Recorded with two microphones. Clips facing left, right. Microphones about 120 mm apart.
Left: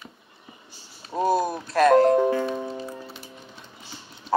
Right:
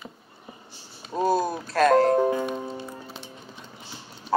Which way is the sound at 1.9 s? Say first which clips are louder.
Left 3 dB; 25° left (ahead or behind).